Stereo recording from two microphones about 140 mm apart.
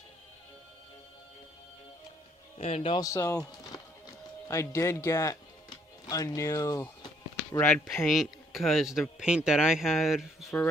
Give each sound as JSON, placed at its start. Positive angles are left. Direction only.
{"t": 2.6, "sound": "speech", "side_deg": 50}
{"t": 2.9, "sound": "speech", "side_deg": 25}
{"t": 4.4, "sound": "speech", "side_deg": 20}
{"t": 8.0, "sound": "speech", "side_deg": 0}